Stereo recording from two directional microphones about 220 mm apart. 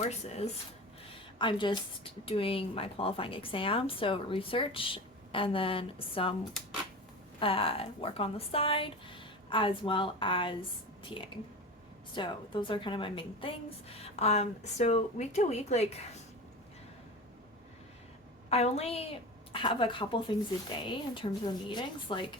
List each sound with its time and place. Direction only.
1.4 s speech: 20° left (ahead or behind)
7.3 s speech: 25° left (ahead or behind)
12.1 s speech: 20° left (ahead or behind)
18.4 s speech: 30° left (ahead or behind)